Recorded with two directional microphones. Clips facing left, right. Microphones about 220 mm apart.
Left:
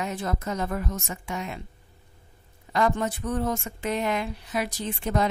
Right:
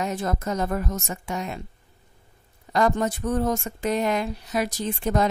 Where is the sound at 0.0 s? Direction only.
45° right (ahead or behind).